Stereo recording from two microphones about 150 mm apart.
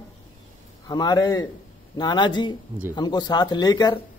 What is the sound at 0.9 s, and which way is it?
A man's voice, 25° left (ahead or behind).